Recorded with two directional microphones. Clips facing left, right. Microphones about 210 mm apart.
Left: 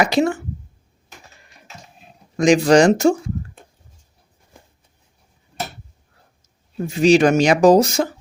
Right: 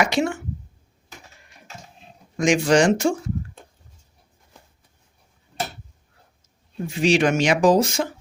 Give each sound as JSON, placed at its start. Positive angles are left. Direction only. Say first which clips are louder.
{"t": 0.0, "sound": "speech", "louder": "left 4 dB", "side_deg": 35}
{"t": 2.4, "sound": "speech", "louder": "left 5 dB", "side_deg": 35}
{"t": 6.7, "sound": "speech", "louder": "left 6 dB", "side_deg": 40}